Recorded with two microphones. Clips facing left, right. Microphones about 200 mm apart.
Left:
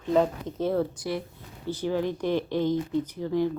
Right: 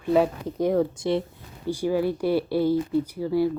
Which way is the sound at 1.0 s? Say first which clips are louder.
Right 6 dB; 25° right (ahead or behind).